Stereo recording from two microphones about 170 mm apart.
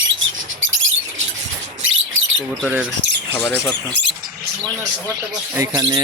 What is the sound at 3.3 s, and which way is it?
Speech, 15° left (ahead or behind).